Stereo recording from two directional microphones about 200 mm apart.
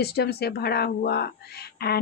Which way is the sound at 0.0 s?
55° left (ahead or behind).